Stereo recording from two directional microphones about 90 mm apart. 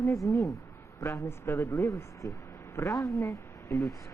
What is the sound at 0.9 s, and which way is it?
Speech, 35° left (ahead or behind).